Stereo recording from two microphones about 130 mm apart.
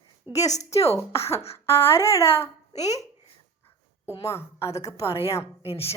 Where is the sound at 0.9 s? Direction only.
20° left (ahead or behind).